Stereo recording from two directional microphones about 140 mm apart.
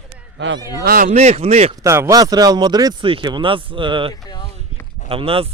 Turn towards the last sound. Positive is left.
turn(degrees=-40)  # may be behind; listen again after turning